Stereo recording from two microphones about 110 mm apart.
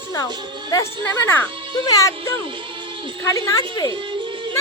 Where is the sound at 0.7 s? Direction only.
25° left (ahead or behind).